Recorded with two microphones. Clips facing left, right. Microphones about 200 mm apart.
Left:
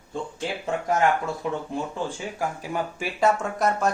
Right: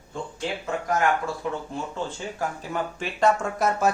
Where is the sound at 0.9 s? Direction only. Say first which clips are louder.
Left 1 dB; 20° left (ahead or behind).